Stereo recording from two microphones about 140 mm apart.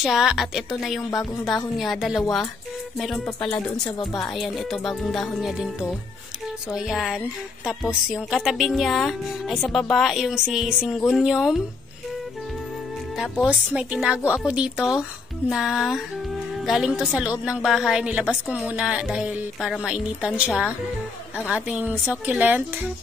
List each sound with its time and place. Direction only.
0.0 s a woman's voice: centre (ahead or behind)
13.2 s a woman's voice: 5° right (ahead or behind)
21.5 s a woman's voice: 10° right (ahead or behind)